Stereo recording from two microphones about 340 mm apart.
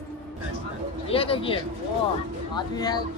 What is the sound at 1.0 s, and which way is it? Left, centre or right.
Speech, centre.